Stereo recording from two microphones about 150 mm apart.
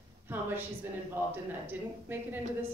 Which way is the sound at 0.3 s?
15° right (ahead or behind).